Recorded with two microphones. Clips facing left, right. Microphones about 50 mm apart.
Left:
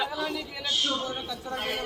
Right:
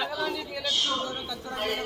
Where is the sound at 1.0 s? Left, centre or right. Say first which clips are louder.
Even; centre.